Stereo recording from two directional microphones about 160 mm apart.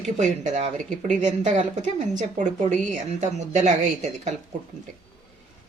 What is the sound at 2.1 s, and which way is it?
Speech, 50° right (ahead or behind).